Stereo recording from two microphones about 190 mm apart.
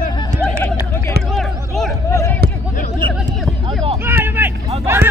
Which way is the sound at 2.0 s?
15° left (ahead or behind).